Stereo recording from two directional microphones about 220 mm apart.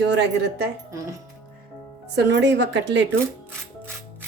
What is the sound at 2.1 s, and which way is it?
Speech, 50° right (ahead or behind).